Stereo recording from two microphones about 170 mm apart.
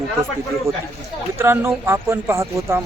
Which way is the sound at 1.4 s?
15° right (ahead or behind).